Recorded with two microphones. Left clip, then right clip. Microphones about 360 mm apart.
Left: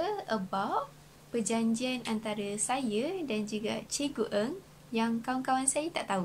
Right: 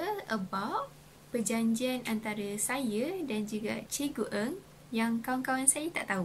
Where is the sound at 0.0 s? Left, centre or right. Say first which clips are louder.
Left 2 dB; centre.